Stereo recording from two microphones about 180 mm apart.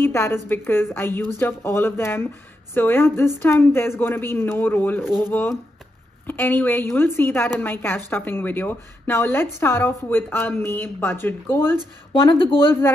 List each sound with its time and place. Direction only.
0.0 s a woman's voice: 15° left (ahead or behind)
12.1 s speech: 30° left (ahead or behind)